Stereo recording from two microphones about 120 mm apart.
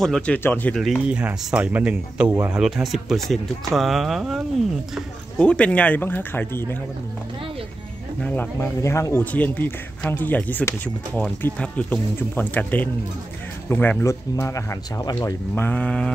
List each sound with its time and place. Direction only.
0.0 s speech: 5° left (ahead or behind)
0.7 s speech: 5° right (ahead or behind)
5.4 s speech: 10° left (ahead or behind)
8.2 s speech: 15° left (ahead or behind)
14.0 s speech: 25° left (ahead or behind)